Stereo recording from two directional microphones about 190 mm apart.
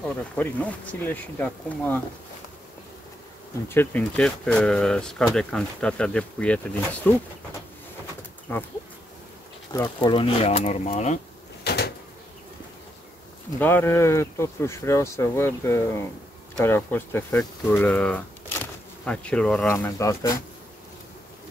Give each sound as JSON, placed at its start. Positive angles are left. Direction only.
{"t": 0.0, "sound": "speech", "side_deg": 5}
{"t": 3.6, "sound": "speech", "side_deg": 10}
{"t": 8.5, "sound": "speech", "side_deg": 10}
{"t": 9.7, "sound": "speech", "side_deg": 20}
{"t": 11.6, "sound": "a sound", "side_deg": 60}
{"t": 13.6, "sound": "speech", "side_deg": 10}
{"t": 19.8, "sound": "speech", "side_deg": 15}